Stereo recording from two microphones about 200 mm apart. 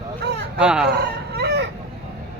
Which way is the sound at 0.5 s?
5° right (ahead or behind).